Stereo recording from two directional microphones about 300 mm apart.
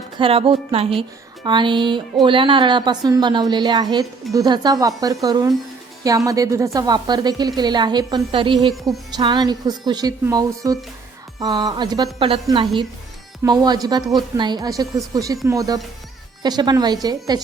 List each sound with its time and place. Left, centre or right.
0.2 s a woman's voice: centre